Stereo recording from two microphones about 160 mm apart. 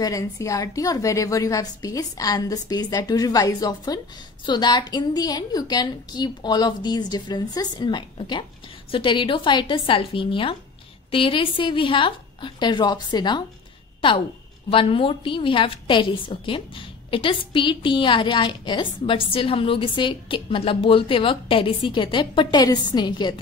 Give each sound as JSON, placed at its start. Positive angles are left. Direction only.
{"t": 0.0, "sound": "a woman's voice", "side_deg": 20}
{"t": 14.7, "sound": "a woman's voice", "side_deg": 35}